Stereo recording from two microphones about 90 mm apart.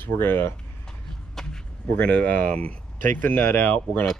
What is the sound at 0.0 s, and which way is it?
Speech, 25° left (ahead or behind).